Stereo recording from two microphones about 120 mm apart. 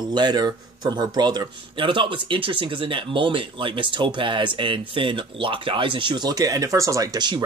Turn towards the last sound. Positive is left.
turn(degrees=-35)  # may be behind; listen again after turning